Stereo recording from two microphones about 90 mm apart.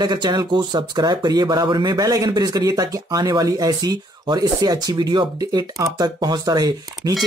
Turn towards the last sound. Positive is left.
turn(degrees=-45)  # may be behind; listen again after turning